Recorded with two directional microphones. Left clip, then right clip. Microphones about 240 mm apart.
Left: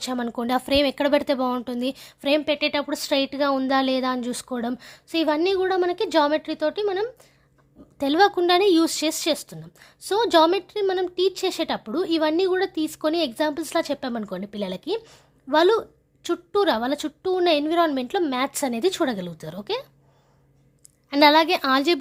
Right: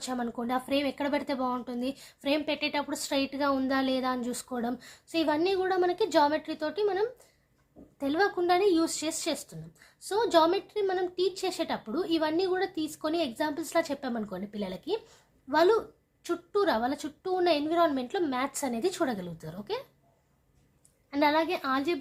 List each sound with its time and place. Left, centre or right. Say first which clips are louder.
0.0 s speech: left 6 dB; left
21.1 s speech: left 10 dB; left